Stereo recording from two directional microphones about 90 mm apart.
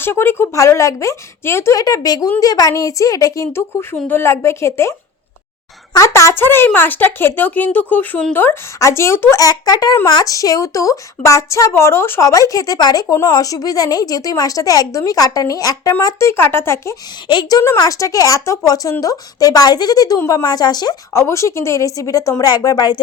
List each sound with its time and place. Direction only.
0.0 s speech: 25° left (ahead or behind)
1.7 s a woman's voice: 45° left (ahead or behind)
9.4 s a woman's voice: 45° left (ahead or behind); by 12.3 s 25° left (ahead or behind)
12.3 s a woman's voice: 40° left (ahead or behind)
17.3 s a woman's voice: 65° left (ahead or behind)
17.7 s a woman's voice: 40° left (ahead or behind)
21.1 s a woman's voice: 35° left (ahead or behind)